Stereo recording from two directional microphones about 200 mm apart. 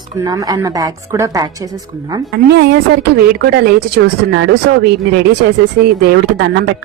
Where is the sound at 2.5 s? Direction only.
60° right (ahead or behind).